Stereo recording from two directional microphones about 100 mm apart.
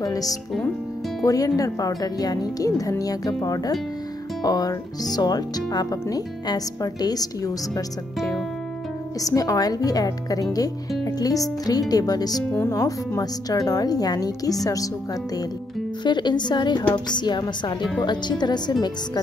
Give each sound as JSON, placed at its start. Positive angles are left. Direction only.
{"t": 0.0, "sound": "speech", "side_deg": 35}
{"t": 9.2, "sound": "speech", "side_deg": 35}
{"t": 12.5, "sound": "speech", "side_deg": 30}
{"t": 16.0, "sound": "a woman's voice", "side_deg": 50}